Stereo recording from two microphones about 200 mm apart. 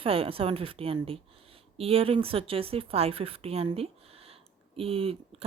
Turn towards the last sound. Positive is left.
turn(degrees=-30)  # may be behind; listen again after turning